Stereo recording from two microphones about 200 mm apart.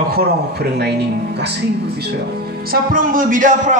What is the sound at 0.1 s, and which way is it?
Speech, 50° right (ahead or behind).